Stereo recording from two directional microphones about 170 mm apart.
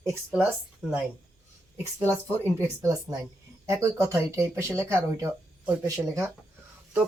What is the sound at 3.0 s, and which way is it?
Speech, 20° right (ahead or behind).